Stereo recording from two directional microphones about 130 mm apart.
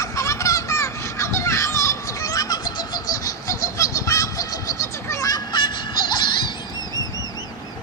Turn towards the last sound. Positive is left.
turn(degrees=40)  # may be behind; listen again after turning